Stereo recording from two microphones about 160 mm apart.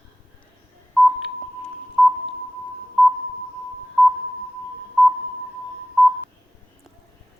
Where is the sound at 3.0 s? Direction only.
5° right (ahead or behind).